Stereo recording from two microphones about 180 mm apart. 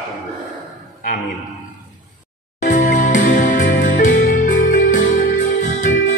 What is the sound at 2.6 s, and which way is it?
Music, 45° left (ahead or behind).